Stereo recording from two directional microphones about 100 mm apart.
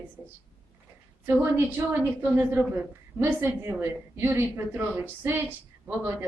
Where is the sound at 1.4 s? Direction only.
25° right (ahead or behind).